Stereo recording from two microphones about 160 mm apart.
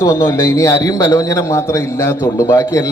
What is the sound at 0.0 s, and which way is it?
A man's voice, 20° left (ahead or behind).